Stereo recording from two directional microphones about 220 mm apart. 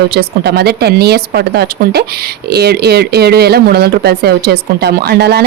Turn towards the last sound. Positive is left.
turn(degrees=-45)  # may be behind; listen again after turning